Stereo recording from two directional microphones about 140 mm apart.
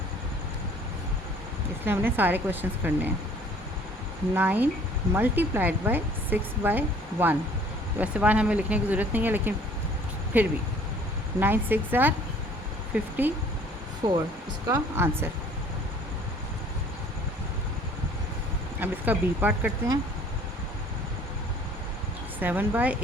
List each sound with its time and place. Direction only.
1.8 s speech: 15° right (ahead or behind)
4.4 s speech: 10° right (ahead or behind)
14.0 s speech: 35° right (ahead or behind)
14.7 s speech: 20° right (ahead or behind)
18.8 s speech: 15° right (ahead or behind)
22.4 s speech: 15° right (ahead or behind)